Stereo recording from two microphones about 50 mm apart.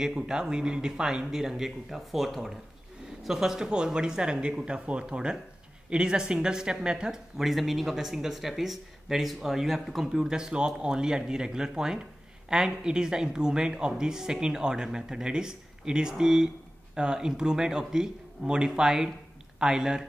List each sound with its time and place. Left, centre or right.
0.0 s speech: centre